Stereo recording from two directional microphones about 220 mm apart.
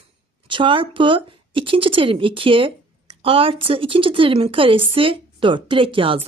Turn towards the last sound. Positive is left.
turn(degrees=-25)  # may be behind; listen again after turning